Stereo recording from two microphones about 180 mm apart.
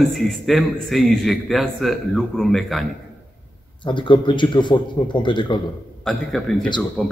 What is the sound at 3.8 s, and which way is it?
A man's voice, 25° left (ahead or behind).